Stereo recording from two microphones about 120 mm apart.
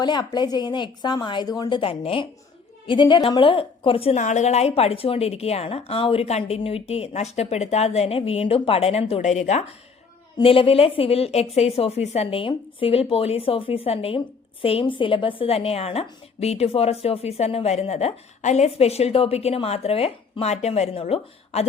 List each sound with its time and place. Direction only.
0.0 s a woman's voice: 40° left (ahead or behind)
1.8 s speech: 50° left (ahead or behind)
4.1 s a woman's voice: 80° left
10.4 s a woman's voice: 50° left (ahead or behind)